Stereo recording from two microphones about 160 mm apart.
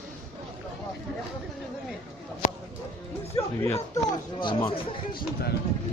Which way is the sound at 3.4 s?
40° left (ahead or behind).